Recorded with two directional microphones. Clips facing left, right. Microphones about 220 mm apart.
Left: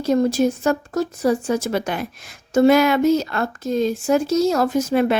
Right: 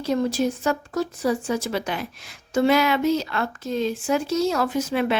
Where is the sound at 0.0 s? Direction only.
45° left (ahead or behind).